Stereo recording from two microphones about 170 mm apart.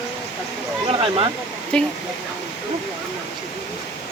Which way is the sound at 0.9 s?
35° right (ahead or behind).